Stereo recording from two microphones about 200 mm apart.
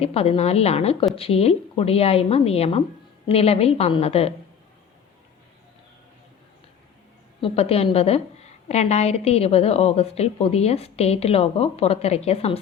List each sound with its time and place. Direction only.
0.0 s a woman's voice: 30° left (ahead or behind)
7.4 s a woman's voice: 30° left (ahead or behind)